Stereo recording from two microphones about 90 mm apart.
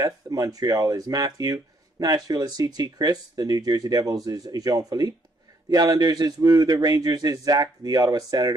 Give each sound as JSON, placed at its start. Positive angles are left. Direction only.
{"t": 0.0, "sound": "speech", "side_deg": -40}